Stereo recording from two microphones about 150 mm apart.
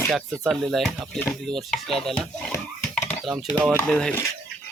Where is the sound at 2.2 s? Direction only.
5° left (ahead or behind).